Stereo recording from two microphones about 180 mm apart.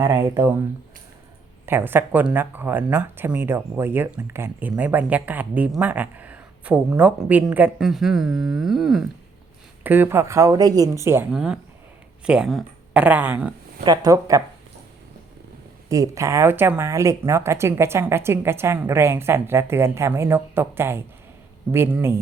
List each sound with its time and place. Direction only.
0.0 s speech: 15° right (ahead or behind)
1.6 s speech: 10° right (ahead or behind)
13.8 s speech: 20° right (ahead or behind)
15.9 s speech: 15° right (ahead or behind)